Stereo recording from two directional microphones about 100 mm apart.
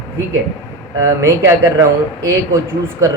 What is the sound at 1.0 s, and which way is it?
Speech, 30° right (ahead or behind).